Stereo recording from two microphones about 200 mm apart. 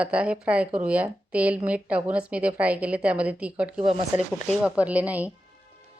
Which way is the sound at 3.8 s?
25° right (ahead or behind).